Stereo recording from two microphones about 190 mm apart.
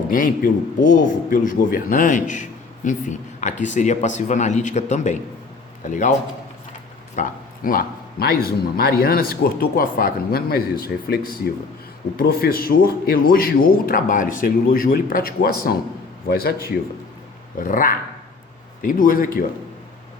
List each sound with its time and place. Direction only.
0.1 s a man's voice: 45° left (ahead or behind)
7.2 s a man's voice: 45° left (ahead or behind)
17.6 s a man's voice: 45° left (ahead or behind)